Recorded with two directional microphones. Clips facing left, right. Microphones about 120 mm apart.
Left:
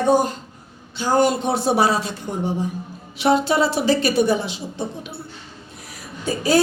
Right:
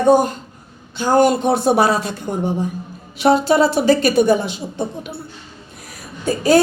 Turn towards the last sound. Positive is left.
turn(degrees=-50)  # may be behind; listen again after turning